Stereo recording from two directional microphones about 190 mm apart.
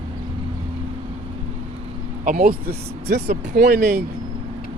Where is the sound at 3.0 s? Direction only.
55° right (ahead or behind).